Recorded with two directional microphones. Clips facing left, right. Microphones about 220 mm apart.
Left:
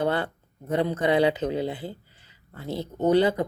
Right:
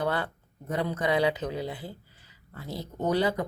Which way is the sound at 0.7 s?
30° left (ahead or behind).